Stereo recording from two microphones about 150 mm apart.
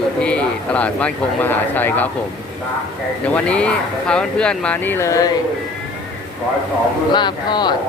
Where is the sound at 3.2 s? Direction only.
10° left (ahead or behind).